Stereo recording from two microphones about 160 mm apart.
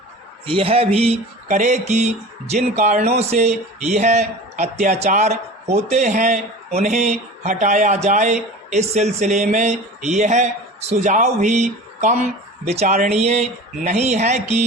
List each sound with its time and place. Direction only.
0.4 s a man's voice: 35° right (ahead or behind)